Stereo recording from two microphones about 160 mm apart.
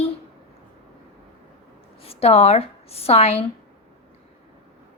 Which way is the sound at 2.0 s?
40° left (ahead or behind).